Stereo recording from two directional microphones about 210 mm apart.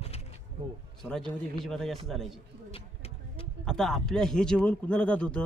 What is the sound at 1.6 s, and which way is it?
Speech, centre (ahead or behind).